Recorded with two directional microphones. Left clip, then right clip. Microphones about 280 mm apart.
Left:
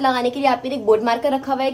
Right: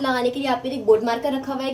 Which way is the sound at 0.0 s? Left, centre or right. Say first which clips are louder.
Left 4 dB; left.